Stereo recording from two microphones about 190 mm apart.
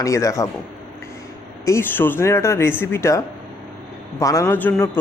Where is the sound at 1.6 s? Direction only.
10° left (ahead or behind).